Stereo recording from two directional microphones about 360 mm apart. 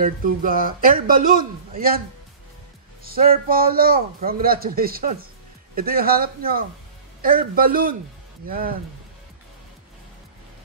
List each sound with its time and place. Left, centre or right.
0.0 s speech: right
3.0 s speech: right